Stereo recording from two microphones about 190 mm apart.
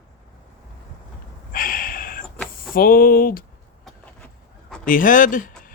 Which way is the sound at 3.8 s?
Centre (ahead or behind).